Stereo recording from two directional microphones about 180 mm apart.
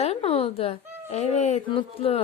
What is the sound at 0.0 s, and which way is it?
Speech, 35° left (ahead or behind).